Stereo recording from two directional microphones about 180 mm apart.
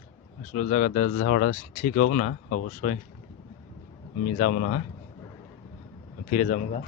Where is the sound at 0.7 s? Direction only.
45° left (ahead or behind).